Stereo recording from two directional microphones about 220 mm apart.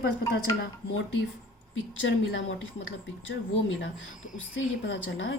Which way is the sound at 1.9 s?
55° left (ahead or behind).